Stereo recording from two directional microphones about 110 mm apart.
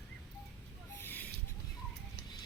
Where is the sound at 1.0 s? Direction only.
15° left (ahead or behind).